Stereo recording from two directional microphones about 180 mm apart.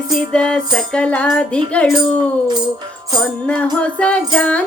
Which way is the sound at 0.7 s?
5° left (ahead or behind).